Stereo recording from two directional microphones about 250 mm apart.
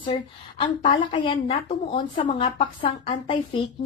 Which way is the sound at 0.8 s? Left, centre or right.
Left.